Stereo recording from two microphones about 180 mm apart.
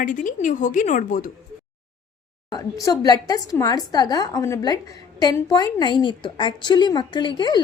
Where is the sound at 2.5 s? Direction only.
20° left (ahead or behind).